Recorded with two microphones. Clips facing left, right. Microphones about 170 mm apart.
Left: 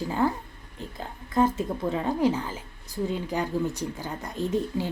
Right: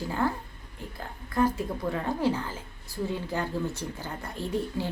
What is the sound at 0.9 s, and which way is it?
Speech, 20° left (ahead or behind).